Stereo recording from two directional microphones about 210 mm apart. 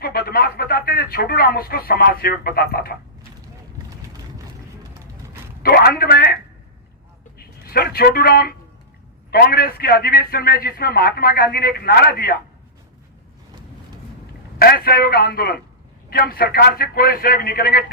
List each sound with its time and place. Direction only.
0.0 s a man's voice: 45° left (ahead or behind)
5.6 s a man's voice: 50° left (ahead or behind)
7.3 s a man's voice: 45° left (ahead or behind)
14.6 s a man's voice: 45° left (ahead or behind)